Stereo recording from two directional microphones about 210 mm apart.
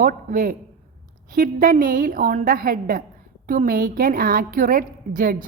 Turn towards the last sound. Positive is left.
turn(degrees=-40)  # may be behind; listen again after turning